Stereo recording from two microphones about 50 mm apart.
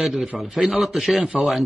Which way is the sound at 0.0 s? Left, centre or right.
Centre.